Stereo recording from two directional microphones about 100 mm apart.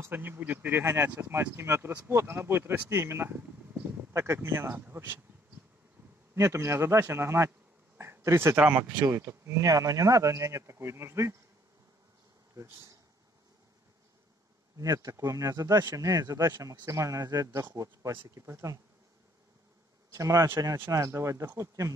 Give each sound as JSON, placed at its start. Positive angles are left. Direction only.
{"t": 0.0, "sound": "a man's voice", "side_deg": -20}
{"t": 6.3, "sound": "a man's voice", "side_deg": -30}
{"t": 8.5, "sound": "speech", "side_deg": -15}
{"t": 9.0, "sound": "speech", "side_deg": -30}
{"t": 12.5, "sound": "a man's voice", "side_deg": -30}
{"t": 14.8, "sound": "a man's voice", "side_deg": -35}
{"t": 20.1, "sound": "speech", "side_deg": -30}